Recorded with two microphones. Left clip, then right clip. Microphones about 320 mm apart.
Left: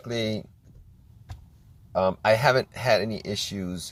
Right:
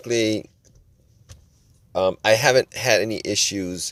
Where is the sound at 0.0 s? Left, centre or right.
Right.